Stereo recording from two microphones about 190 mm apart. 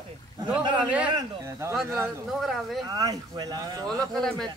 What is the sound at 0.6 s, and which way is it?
Speech, 25° right (ahead or behind).